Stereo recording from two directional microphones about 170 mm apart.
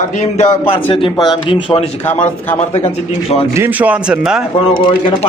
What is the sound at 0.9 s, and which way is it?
Speech, 30° left (ahead or behind).